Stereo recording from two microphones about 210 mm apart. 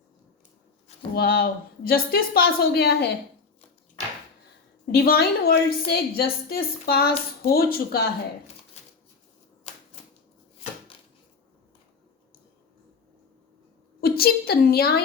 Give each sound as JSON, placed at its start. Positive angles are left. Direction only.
{"t": 1.1, "sound": "a woman's voice", "side_deg": 45}
{"t": 4.9, "sound": "a woman's voice", "side_deg": 50}
{"t": 14.0, "sound": "a woman's voice", "side_deg": 45}